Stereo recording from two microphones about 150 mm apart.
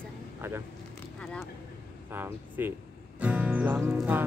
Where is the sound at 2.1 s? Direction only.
15° right (ahead or behind).